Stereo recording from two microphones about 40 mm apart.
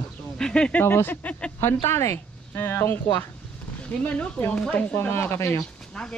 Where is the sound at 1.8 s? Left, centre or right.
Left.